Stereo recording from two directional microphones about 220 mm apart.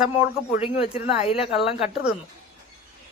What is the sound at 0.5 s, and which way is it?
Speech, 30° left (ahead or behind).